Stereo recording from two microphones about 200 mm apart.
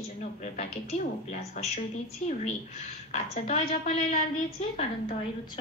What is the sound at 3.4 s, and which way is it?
A woman's voice, 35° left (ahead or behind).